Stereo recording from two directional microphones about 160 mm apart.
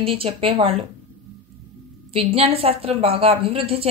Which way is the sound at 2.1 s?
35° right (ahead or behind).